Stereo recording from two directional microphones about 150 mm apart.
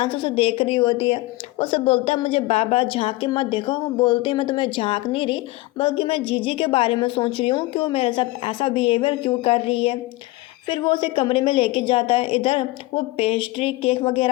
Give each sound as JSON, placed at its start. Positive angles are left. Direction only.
{"t": 0.0, "sound": "a woman's voice", "side_deg": 35}